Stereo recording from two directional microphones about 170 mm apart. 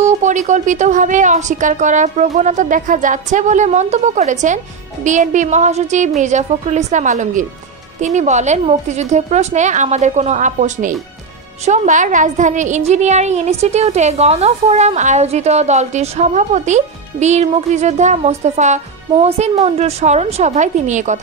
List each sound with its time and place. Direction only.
0.0 s a woman's voice: 45° right (ahead or behind)